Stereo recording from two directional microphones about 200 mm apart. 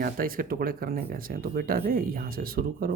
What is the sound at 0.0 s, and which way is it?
Speech, 45° right (ahead or behind).